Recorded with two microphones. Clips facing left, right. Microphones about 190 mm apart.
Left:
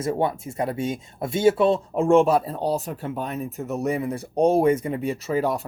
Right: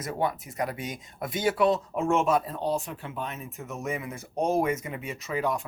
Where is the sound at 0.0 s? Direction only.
25° left (ahead or behind).